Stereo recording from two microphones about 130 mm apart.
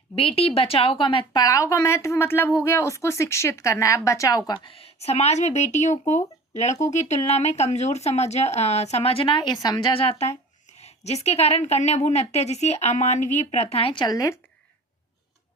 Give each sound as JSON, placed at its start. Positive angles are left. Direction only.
{"t": 0.2, "sound": "a woman's voice", "side_deg": 50}
{"t": 4.5, "sound": "a woman's voice", "side_deg": 40}
{"t": 9.9, "sound": "a woman's voice", "side_deg": 45}
{"t": 14.0, "sound": "a woman's voice", "side_deg": 25}